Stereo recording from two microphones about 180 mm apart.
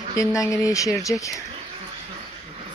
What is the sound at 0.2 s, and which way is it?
Speech, 15° left (ahead or behind).